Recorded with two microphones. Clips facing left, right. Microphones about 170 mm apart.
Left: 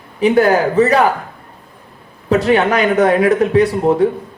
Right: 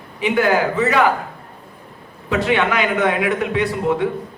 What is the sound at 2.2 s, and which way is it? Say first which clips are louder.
A man's voice: left 5 dB; 40° left (ahead or behind).